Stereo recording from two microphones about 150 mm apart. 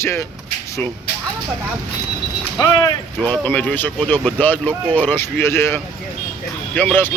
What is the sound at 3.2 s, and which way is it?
Speech, 10° left (ahead or behind).